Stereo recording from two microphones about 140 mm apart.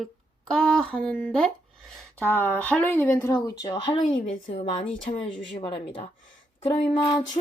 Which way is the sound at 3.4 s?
30° left (ahead or behind).